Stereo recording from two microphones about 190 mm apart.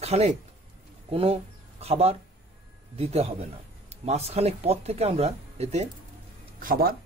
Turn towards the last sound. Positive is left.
turn(degrees=-50)  # may be behind; listen again after turning